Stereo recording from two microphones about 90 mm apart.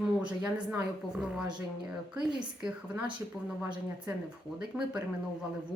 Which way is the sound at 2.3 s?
10° right (ahead or behind).